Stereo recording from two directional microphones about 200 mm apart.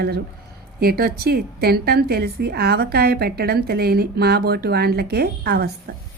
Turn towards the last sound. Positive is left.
turn(degrees=-50)  # may be behind; listen again after turning